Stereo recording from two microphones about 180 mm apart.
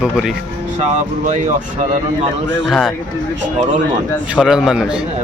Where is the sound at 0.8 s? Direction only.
40° right (ahead or behind).